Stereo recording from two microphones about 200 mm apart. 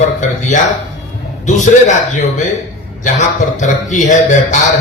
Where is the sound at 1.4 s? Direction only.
35° left (ahead or behind).